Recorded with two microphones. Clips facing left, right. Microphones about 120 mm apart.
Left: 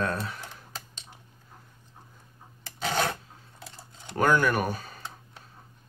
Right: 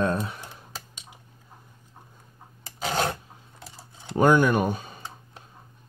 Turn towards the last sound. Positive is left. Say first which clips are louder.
# right 1 dB
turn(degrees=-20)  # may be behind; listen again after turning